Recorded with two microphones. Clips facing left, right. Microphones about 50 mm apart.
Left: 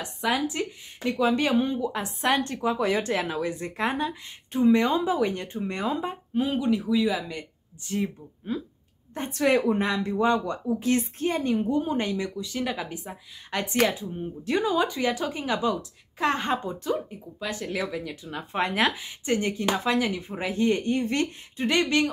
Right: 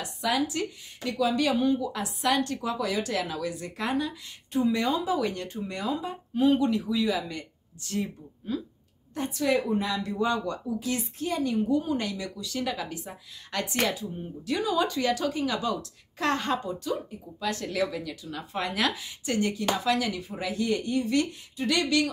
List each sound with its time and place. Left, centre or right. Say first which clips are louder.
0.0 s a sound: left 2 dB; left
0.5 s a woman's voice: left 1 dB; left
5.7 s speech: left 3 dB; left
6.5 s speech: left 1 dB; centre
9.3 s a woman's voice: left 4 dB; left
9.8 s speech: left 3 dB; left
10.9 s a woman's voice: left 6 dB; left
16.9 s speech: left 3 dB; centre
18.1 s speech: left 3 dB; left